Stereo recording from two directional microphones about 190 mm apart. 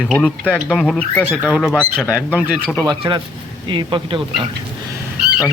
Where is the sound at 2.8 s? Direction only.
25° right (ahead or behind).